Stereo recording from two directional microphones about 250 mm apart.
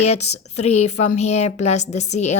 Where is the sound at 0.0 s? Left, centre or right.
Left.